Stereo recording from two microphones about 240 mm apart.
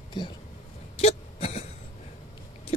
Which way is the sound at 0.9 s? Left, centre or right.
Left.